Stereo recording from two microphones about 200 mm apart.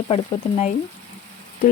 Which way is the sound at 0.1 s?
30° left (ahead or behind).